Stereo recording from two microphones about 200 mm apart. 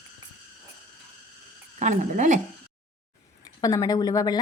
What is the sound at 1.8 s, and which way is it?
Speech, 40° right (ahead or behind).